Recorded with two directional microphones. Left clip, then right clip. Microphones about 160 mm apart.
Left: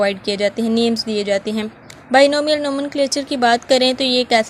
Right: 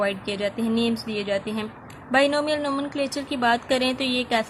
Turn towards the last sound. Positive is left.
turn(degrees=40)  # may be behind; listen again after turning